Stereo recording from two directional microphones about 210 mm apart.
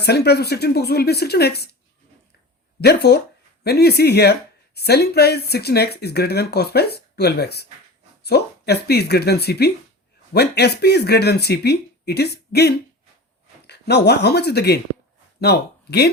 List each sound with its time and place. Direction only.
0.0 s speech: 50° left (ahead or behind)
2.8 s speech: 50° left (ahead or behind)